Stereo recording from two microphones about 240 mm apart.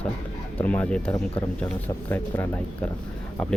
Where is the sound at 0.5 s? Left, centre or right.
Centre.